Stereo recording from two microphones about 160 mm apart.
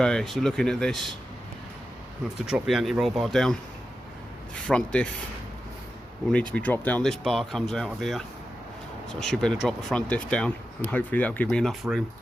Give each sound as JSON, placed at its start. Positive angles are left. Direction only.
{"t": 0.0, "sound": "speech", "side_deg": 5}
{"t": 2.5, "sound": "speech", "side_deg": 0}
{"t": 4.5, "sound": "rub", "side_deg": 5}
{"t": 6.5, "sound": "speech", "side_deg": 10}
{"t": 9.2, "sound": "speech", "side_deg": 5}